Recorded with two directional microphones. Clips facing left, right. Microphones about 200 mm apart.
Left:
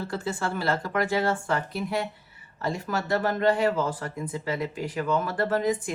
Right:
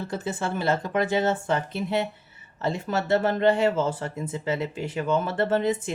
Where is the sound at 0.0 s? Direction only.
20° right (ahead or behind).